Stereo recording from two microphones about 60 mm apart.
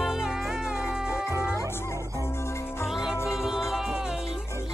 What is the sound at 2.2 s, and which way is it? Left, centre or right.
Music, left.